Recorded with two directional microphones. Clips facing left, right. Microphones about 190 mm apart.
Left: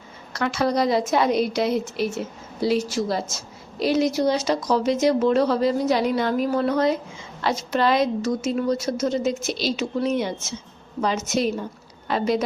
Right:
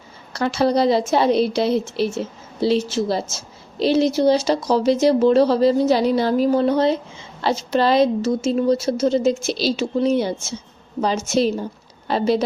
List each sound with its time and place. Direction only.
0.3 s a woman's voice: 30° right (ahead or behind)